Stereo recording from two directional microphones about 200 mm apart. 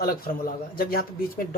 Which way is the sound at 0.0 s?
45° left (ahead or behind).